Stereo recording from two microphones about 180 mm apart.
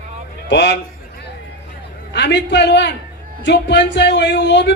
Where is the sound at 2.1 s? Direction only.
75° left (ahead or behind).